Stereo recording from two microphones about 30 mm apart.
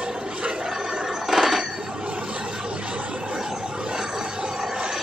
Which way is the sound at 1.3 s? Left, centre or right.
Centre.